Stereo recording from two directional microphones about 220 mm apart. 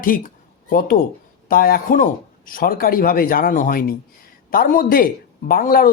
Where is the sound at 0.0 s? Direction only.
40° left (ahead or behind).